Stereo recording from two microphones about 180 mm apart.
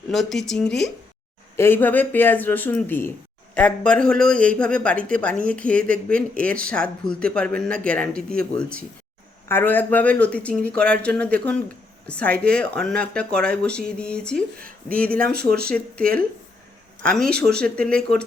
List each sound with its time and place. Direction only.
0.1 s a man's voice: centre (ahead or behind)
15.3 s speech: 60° right (ahead or behind)
15.6 s speech: 5° left (ahead or behind)